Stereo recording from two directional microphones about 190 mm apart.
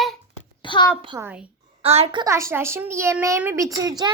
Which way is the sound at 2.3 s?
15° right (ahead or behind).